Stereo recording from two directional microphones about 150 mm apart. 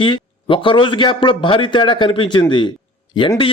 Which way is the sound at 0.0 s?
35° left (ahead or behind).